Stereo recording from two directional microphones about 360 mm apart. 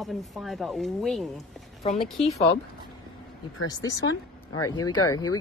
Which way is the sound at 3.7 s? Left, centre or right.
Centre.